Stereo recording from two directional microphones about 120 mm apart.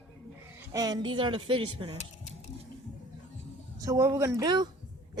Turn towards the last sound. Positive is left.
turn(degrees=-25)  # may be behind; listen again after turning